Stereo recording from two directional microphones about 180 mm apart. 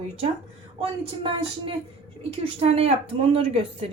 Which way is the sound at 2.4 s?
35° right (ahead or behind).